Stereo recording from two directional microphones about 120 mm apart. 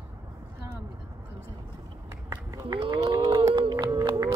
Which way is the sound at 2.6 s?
45° right (ahead or behind).